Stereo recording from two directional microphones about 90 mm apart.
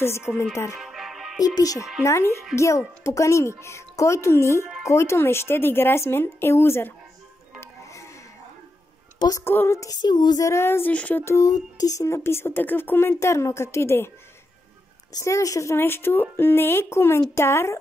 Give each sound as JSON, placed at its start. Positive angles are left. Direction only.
{"t": 0.0, "sound": "speech", "side_deg": 30}
{"t": 0.7, "sound": "music", "side_deg": -5}
{"t": 1.4, "sound": "female singing", "side_deg": 45}
{"t": 2.0, "sound": "a woman's voice", "side_deg": 30}
{"t": 7.6, "sound": "music", "side_deg": 35}
{"t": 9.4, "sound": "speech", "side_deg": 25}
{"t": 9.8, "sound": "female singing", "side_deg": 45}
{"t": 10.5, "sound": "speech", "side_deg": 30}
{"t": 10.9, "sound": "a sound", "side_deg": 15}
{"t": 11.2, "sound": "speech", "side_deg": 35}
{"t": 15.1, "sound": "a woman's voice", "side_deg": 35}
{"t": 15.7, "sound": "speech", "side_deg": 25}